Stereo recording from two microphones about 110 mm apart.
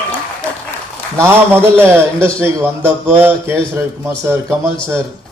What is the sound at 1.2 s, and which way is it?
A man's voice, 20° right (ahead or behind).